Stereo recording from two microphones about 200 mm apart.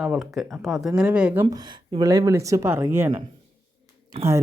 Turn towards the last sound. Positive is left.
turn(degrees=-30)  # may be behind; listen again after turning